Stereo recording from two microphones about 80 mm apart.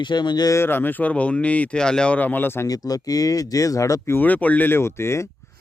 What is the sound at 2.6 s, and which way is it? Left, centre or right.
Speech, left.